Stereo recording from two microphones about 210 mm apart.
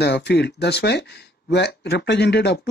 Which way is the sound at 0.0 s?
50° left (ahead or behind).